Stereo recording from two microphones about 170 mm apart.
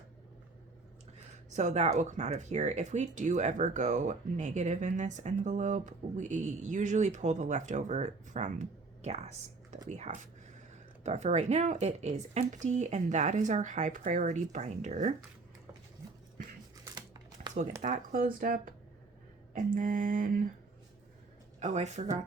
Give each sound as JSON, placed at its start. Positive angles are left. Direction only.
{"t": 1.5, "sound": "speech", "side_deg": -40}
{"t": 11.0, "sound": "speech", "side_deg": -40}
{"t": 16.8, "sound": "crumpling", "side_deg": -25}
{"t": 17.8, "sound": "speech", "side_deg": -50}
{"t": 21.6, "sound": "speech", "side_deg": -45}